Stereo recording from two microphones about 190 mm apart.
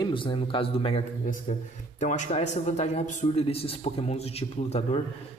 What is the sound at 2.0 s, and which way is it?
A man's voice, 40° left (ahead or behind).